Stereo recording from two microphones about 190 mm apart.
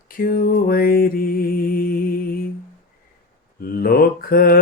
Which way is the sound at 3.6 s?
50° left (ahead or behind).